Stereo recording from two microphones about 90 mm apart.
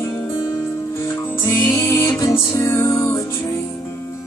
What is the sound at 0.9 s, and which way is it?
Music, 30° left (ahead or behind).